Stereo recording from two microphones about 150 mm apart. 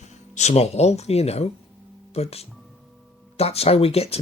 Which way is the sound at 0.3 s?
45° left (ahead or behind).